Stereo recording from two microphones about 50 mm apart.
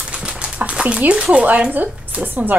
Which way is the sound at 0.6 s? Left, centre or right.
Right.